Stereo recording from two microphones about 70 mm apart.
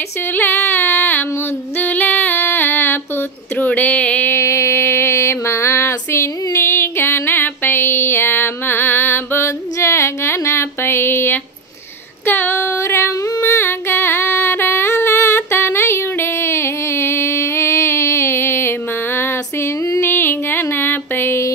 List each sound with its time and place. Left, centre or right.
0.3 s music: left
1.8 s female singing: left
4.3 s a sound: left
12.3 s female singing: left
20.0 s music: left